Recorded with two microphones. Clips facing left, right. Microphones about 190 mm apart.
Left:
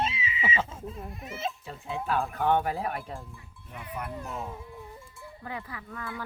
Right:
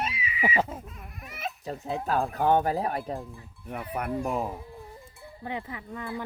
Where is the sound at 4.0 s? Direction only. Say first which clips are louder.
Right 7 dB; 65° right (ahead or behind).